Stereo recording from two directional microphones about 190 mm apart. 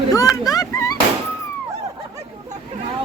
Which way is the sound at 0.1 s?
20° left (ahead or behind).